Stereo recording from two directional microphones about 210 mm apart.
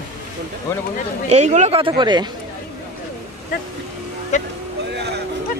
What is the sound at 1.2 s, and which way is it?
Speech, 35° right (ahead or behind).